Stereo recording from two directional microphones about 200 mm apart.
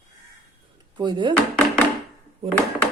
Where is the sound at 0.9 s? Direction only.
20° right (ahead or behind).